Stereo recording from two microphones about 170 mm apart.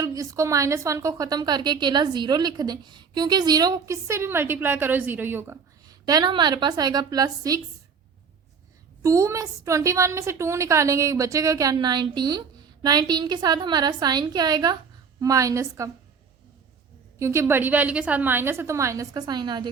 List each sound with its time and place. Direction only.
0.0 s a woman's voice: 20° right (ahead or behind)
5.9 s a woman's voice: 20° right (ahead or behind)
9.0 s a woman's voice: 20° right (ahead or behind)
17.2 s a woman's voice: 15° right (ahead or behind)